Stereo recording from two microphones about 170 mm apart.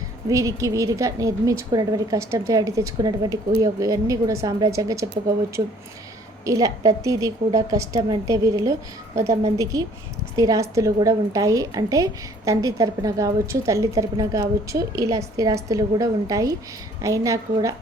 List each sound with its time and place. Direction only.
0.3 s a woman's voice: 20° right (ahead or behind)
6.4 s a woman's voice: 20° right (ahead or behind)
9.7 s a woman's voice: 20° right (ahead or behind)